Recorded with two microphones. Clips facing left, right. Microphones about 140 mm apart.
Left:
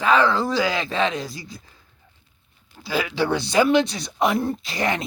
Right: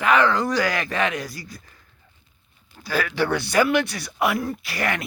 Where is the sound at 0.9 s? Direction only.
10° right (ahead or behind).